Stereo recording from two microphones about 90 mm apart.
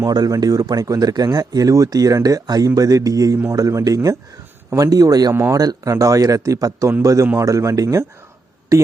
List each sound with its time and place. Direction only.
0.0 s speech: 45° right (ahead or behind)